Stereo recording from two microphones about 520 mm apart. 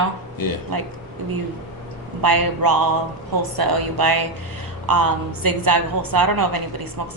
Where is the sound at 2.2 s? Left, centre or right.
Right.